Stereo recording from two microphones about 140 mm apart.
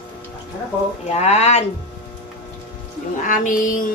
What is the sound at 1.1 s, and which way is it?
Speech, 50° left (ahead or behind).